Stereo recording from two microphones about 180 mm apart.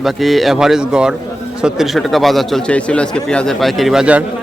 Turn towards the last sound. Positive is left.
turn(degrees=-5)  # may be behind; listen again after turning